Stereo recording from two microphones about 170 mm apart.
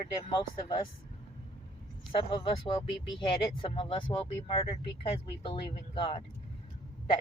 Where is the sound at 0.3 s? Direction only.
30° left (ahead or behind).